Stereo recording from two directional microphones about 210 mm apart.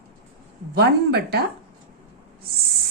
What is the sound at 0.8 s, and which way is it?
Speech, 50° right (ahead or behind).